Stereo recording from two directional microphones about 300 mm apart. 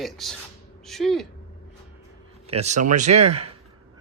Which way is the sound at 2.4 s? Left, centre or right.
Right.